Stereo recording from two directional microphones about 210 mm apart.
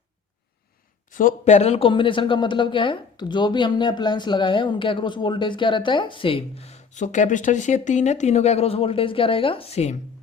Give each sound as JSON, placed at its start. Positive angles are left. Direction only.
{"t": 1.1, "sound": "speech", "side_deg": 35}